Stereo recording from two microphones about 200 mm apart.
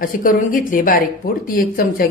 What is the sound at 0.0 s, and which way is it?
A woman's voice, 45° left (ahead or behind).